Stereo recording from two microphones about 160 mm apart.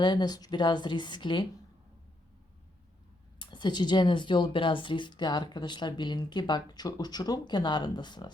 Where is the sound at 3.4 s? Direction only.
30° left (ahead or behind).